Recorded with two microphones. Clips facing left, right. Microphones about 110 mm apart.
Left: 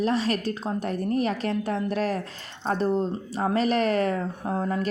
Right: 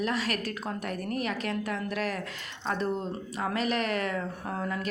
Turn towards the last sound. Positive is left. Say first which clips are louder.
# left 6 dB
turn(degrees=30)  # may be behind; listen again after turning